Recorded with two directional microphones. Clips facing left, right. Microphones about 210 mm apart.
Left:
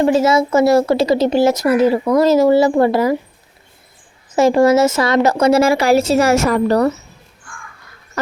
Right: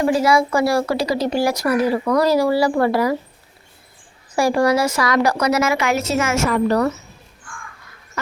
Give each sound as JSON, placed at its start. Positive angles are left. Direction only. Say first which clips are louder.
{"t": 0.0, "sound": "speech", "louder": "left 3 dB", "side_deg": 25}
{"t": 4.3, "sound": "speech", "louder": "left 5 dB", "side_deg": 20}